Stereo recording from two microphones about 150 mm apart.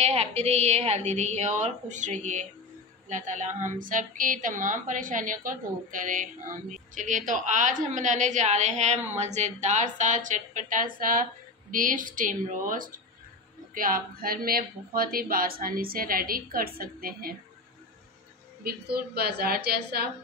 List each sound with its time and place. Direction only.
0.0 s a woman's voice: 45° right (ahead or behind); by 17.4 s 75° right (ahead or behind)
18.6 s a woman's voice: 85° right